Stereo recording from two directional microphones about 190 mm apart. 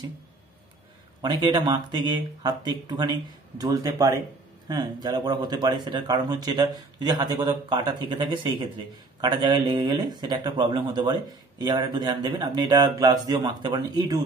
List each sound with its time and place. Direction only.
1.2 s speech: 25° right (ahead or behind)